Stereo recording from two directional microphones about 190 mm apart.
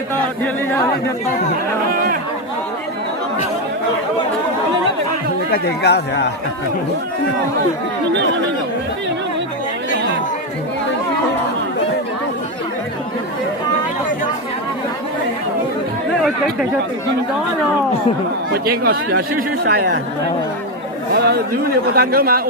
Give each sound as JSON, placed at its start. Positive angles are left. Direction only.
{"t": 1.9, "sound": "chatter", "side_deg": -50}
{"t": 5.5, "sound": "speech", "side_deg": 60}
{"t": 18.5, "sound": "a man's voice", "side_deg": -55}
{"t": 21.1, "sound": "a man's voice", "side_deg": -55}